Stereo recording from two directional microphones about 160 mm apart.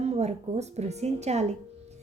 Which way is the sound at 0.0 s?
45° right (ahead or behind).